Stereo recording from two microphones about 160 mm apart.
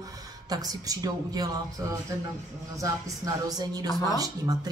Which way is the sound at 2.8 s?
20° right (ahead or behind).